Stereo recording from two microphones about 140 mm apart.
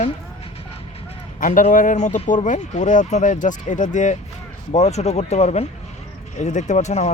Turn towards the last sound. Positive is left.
turn(degrees=55)  # may be behind; listen again after turning